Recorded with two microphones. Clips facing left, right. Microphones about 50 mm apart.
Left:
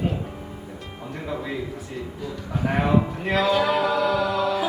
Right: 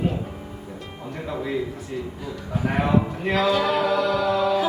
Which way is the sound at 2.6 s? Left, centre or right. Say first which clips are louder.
Even; centre.